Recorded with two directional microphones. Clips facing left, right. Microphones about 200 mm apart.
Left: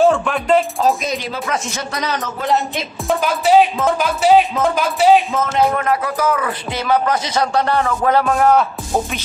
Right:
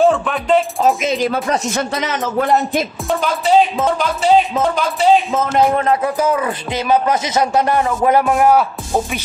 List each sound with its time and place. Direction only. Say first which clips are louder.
0.0 s speech: even; centre (ahead or behind)
2.0 s speech: right 1 dB; 20° right (ahead or behind)
3.1 s speech: left 2 dB; 5° left (ahead or behind)
5.3 s speech: right 2 dB; 30° right (ahead or behind); by 9.2 s 10° right (ahead or behind)